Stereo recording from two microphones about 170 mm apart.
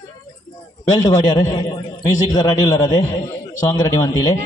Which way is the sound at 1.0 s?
20° left (ahead or behind).